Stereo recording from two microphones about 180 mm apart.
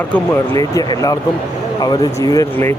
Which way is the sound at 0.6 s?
20° left (ahead or behind).